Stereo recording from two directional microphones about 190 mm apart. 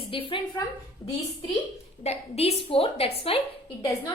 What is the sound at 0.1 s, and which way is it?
Speech, 25° left (ahead or behind).